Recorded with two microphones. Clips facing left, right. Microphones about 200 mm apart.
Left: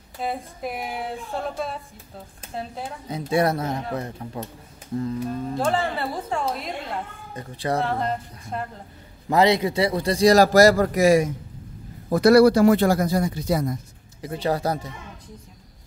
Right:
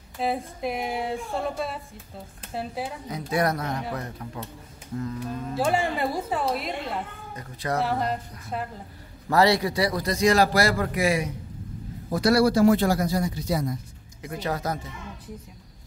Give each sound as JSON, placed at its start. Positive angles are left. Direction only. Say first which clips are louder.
{"t": 0.2, "sound": "speech", "louder": "right 2 dB", "side_deg": 0}
{"t": 3.1, "sound": "speech", "louder": "left 4 dB", "side_deg": 25}
{"t": 5.6, "sound": "a woman's voice", "louder": "right 1 dB", "side_deg": -10}
{"t": 7.3, "sound": "a man's voice", "louder": "left 3 dB", "side_deg": 30}
{"t": 7.8, "sound": "speech", "louder": "left 1 dB", "side_deg": -5}
{"t": 9.3, "sound": "a man's voice", "louder": "left 2 dB", "side_deg": 20}
{"t": 12.1, "sound": "speech", "louder": "left 6 dB", "side_deg": 55}
{"t": 14.2, "sound": "a man's voice", "louder": "left 5 dB", "side_deg": 30}